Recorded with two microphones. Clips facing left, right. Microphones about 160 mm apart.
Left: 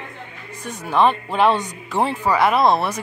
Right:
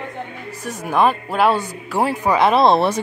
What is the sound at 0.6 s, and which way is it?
Speech, 10° right (ahead or behind).